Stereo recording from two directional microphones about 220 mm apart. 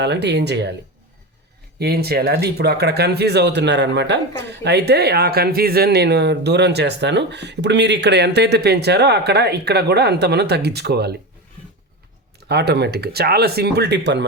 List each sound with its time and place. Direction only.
0.0 s speech: 50° right (ahead or behind)
1.8 s speech: 45° right (ahead or behind)
12.5 s speech: 50° right (ahead or behind)